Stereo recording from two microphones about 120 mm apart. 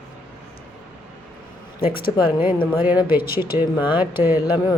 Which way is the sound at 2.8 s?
15° right (ahead or behind).